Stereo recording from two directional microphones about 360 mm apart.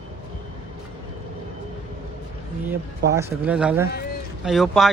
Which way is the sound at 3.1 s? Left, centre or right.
Centre.